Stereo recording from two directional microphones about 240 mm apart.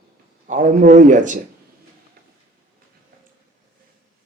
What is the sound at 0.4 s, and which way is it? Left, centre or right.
Speech, right.